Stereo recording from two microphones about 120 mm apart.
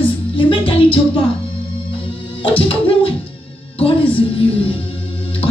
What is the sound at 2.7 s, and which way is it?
Music, 50° left (ahead or behind).